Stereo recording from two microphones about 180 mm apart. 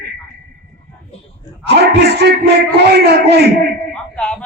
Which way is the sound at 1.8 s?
65° right (ahead or behind).